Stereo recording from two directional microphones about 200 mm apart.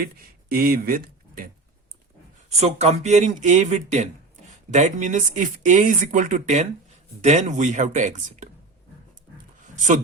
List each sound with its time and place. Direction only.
0.0 s speech: 50° right (ahead or behind)
2.6 s speech: 30° right (ahead or behind)